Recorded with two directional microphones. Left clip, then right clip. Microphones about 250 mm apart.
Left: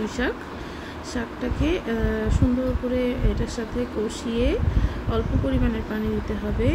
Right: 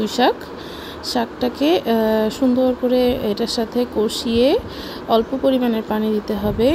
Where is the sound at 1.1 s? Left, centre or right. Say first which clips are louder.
Right 9 dB; centre.